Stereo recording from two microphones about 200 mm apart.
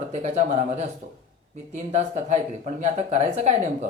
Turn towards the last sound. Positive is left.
turn(degrees=-35)  # may be behind; listen again after turning